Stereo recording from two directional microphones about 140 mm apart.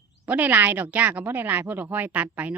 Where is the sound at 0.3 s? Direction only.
10° right (ahead or behind).